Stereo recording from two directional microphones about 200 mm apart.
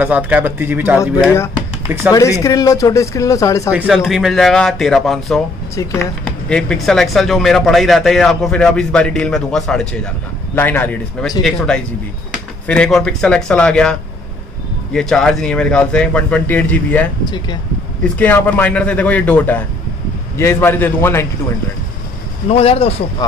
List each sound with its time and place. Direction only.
0.0 s speech: 10° right (ahead or behind)
2.1 s a man's voice: 15° left (ahead or behind)
3.7 s speech: 5° right (ahead or behind)
5.8 s a man's voice: 10° left (ahead or behind)
12.6 s speech: 5° left (ahead or behind)
17.2 s speech: 20° left (ahead or behind)
18.0 s a man's voice: 5° left (ahead or behind)
22.5 s speech: 30° left (ahead or behind)